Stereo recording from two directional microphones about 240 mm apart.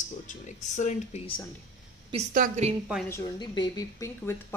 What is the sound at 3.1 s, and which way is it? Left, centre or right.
Speech, centre.